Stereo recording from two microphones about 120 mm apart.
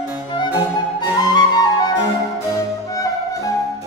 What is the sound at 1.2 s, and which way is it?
Flute, 35° left (ahead or behind).